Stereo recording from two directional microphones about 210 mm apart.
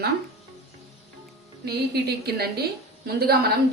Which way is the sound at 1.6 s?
50° right (ahead or behind).